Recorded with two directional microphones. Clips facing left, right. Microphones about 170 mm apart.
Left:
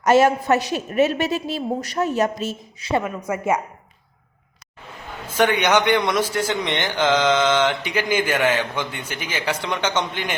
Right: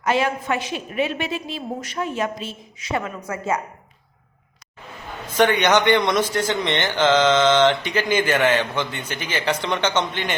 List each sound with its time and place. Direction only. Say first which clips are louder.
0.0 s a woman's voice: left 6 dB; 45° left (ahead or behind)
3.0 s a man's voice: left 3 dB; 15° left (ahead or behind)
5.3 s a man's voice: right 1 dB; 10° left (ahead or behind)